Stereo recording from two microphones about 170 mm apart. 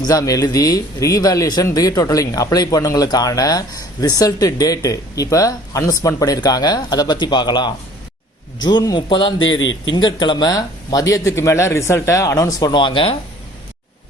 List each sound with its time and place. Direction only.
0.1 s a man's voice: 20° left (ahead or behind)
9.6 s a man's voice: 90° left
9.9 s a man's voice: 25° left (ahead or behind)